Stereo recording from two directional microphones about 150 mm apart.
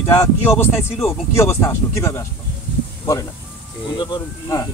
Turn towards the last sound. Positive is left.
turn(degrees=25)  # may be behind; listen again after turning